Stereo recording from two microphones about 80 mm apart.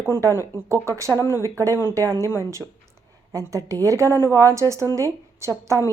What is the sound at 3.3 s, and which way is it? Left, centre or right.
A woman's voice, right.